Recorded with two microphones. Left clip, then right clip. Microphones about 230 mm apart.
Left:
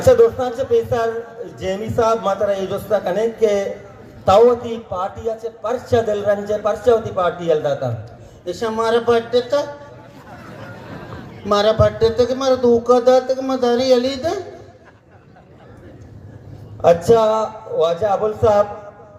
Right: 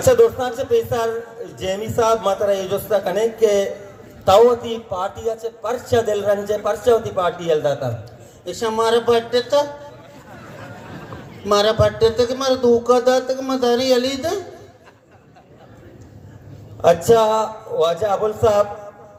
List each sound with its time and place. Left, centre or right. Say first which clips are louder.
0.0 s a man's voice: left 2 dB; right
11.4 s a man's voice: left 1 dB; right
16.8 s a man's voice: left 1 dB; right